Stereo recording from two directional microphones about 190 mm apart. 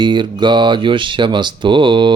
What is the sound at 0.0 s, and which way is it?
Speech, 25° right (ahead or behind).